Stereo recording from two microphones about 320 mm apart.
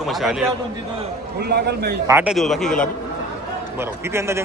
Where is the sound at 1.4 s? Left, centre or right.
Right.